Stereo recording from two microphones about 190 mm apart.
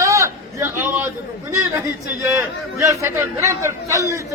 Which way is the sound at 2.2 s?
15° right (ahead or behind).